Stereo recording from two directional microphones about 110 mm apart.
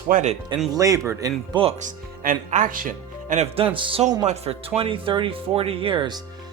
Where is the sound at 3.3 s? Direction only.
65° right (ahead or behind).